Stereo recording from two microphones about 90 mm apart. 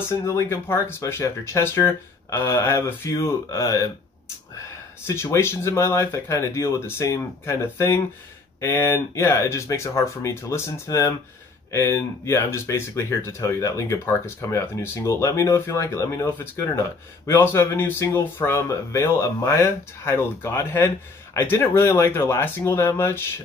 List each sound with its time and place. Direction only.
0.1 s speech: 35° left (ahead or behind)
5.0 s speech: 30° left (ahead or behind)